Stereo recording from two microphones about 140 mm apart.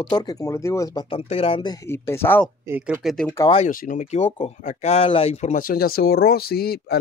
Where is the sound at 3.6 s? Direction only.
65° left (ahead or behind).